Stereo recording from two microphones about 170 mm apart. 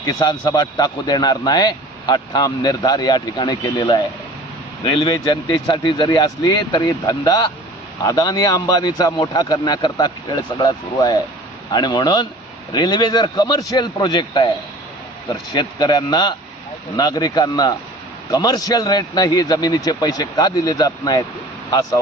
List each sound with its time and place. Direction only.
0.0 s a man's voice: 20° left (ahead or behind)
15.5 s a man's voice: 25° left (ahead or behind)